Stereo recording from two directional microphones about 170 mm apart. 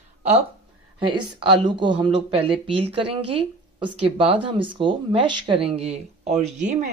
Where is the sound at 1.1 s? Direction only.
30° right (ahead or behind).